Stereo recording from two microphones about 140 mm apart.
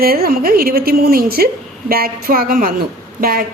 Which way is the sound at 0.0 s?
90° right.